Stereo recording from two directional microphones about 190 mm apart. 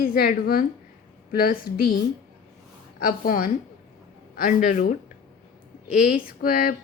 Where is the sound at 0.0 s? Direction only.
50° left (ahead or behind).